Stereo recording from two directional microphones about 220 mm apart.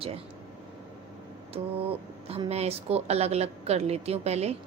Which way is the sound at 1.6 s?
25° right (ahead or behind).